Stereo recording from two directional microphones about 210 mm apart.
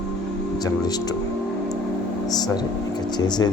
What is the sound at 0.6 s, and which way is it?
Speech, 20° left (ahead or behind).